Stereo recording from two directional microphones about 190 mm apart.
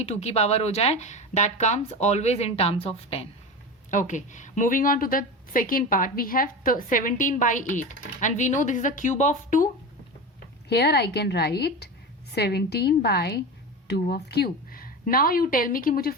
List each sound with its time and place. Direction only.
0.0 s a woman's voice: 35° left (ahead or behind)
10.7 s a woman's voice: 60° left (ahead or behind)